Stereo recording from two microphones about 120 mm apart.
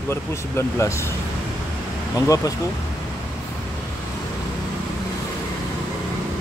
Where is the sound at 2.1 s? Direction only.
30° left (ahead or behind).